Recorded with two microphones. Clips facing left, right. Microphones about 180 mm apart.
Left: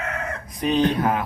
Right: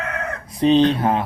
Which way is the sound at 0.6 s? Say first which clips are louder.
Right 5 dB; 30° right (ahead or behind).